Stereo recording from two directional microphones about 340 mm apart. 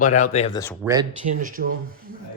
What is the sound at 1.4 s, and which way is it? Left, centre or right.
Speech, right.